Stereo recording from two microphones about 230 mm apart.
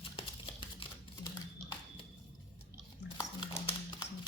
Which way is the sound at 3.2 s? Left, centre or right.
Centre.